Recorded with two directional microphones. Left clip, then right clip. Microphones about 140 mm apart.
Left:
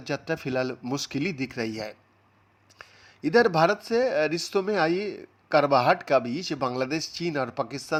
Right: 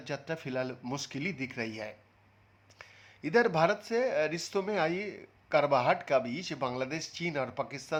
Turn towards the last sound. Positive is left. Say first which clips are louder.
# left 6 dB
turn(degrees=35)  # may be behind; listen again after turning